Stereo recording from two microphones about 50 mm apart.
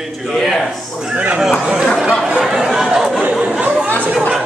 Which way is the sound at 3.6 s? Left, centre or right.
Right.